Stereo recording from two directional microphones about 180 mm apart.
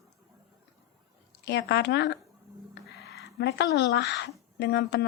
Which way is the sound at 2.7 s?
65° left (ahead or behind).